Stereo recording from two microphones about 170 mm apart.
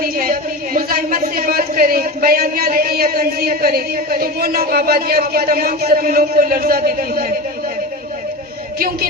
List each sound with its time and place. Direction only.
0.0 s speech: 55° right (ahead or behind)